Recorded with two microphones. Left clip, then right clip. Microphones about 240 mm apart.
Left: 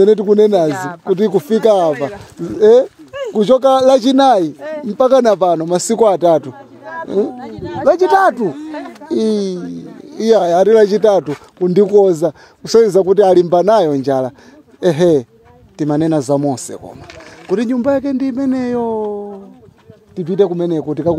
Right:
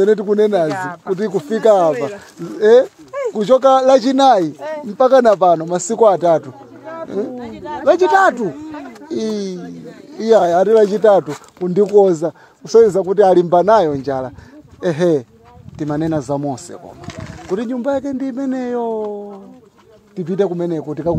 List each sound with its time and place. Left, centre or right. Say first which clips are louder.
0.0 s speech: left 4 dB; left
0.7 s speech: left 3 dB; centre
1.1 s speech: left 6 dB; left
4.6 s speech: left 1 dB; centre
4.8 s speech: even; left
7.3 s speech: left 2 dB; centre
8.1 s speech: left 1 dB; left
20.2 s speech: left 4 dB; centre